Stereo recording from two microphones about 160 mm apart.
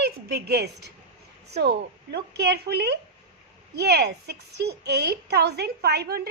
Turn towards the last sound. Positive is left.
turn(degrees=-80)